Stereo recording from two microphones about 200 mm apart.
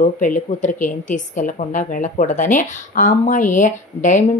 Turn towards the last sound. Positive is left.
turn(degrees=40)  # may be behind; listen again after turning